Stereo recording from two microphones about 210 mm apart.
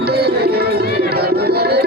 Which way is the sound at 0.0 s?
50° right (ahead or behind).